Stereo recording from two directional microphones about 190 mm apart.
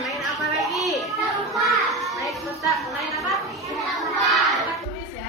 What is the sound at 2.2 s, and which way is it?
Chatter, centre (ahead or behind).